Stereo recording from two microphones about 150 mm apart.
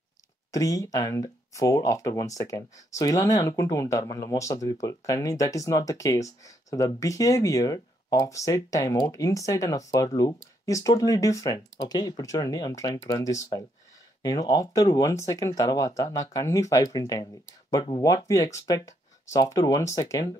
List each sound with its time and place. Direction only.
0.5 s speech: 20° left (ahead or behind)